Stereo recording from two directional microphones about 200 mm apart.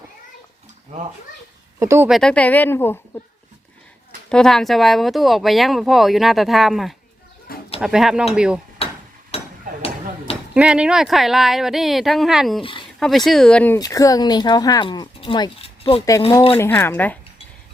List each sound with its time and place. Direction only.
1.8 s speech: 15° right (ahead or behind)
2.0 s speech: centre (ahead or behind)
4.3 s speech: 5° left (ahead or behind)
9.3 s hammer: 30° left (ahead or behind)
10.5 s speech: 5° right (ahead or behind)
13.7 s speech: 15° left (ahead or behind)
16.5 s speech: 10° left (ahead or behind)